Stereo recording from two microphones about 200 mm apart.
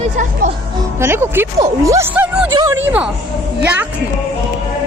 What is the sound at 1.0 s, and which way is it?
A woman's voice, 10° right (ahead or behind).